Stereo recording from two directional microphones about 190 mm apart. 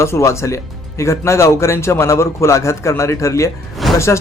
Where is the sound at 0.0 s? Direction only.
15° left (ahead or behind).